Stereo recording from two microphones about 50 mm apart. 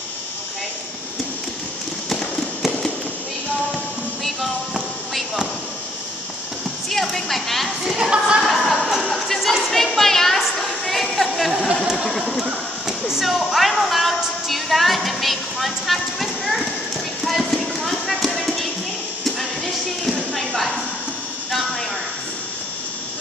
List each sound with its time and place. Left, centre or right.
6.9 s speech: centre
7.8 s speech: centre
8.4 s a sound: centre
12.2 s speech: centre
13.1 s music: centre
17.2 s clip-clop: centre
18.4 s music: centre
19.2 s a sound: centre